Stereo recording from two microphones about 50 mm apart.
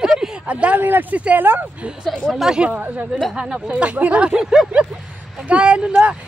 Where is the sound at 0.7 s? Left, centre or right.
Right.